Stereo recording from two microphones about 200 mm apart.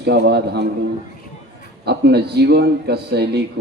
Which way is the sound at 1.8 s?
55° right (ahead or behind).